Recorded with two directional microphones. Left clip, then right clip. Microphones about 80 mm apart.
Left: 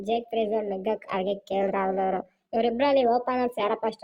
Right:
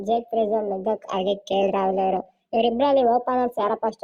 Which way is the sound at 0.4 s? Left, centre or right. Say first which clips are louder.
Right 5 dB; centre.